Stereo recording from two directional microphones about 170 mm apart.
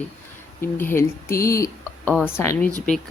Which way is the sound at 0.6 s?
15° left (ahead or behind).